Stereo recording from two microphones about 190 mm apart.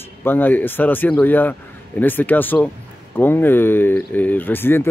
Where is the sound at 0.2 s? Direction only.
10° left (ahead or behind).